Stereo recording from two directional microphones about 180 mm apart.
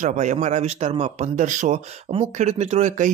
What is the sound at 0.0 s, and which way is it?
Speech, 40° right (ahead or behind).